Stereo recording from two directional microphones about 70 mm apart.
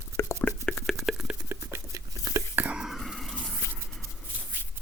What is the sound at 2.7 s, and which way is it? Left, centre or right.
Whispering, centre.